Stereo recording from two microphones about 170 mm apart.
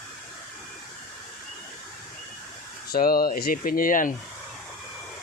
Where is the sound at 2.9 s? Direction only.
60° left (ahead or behind).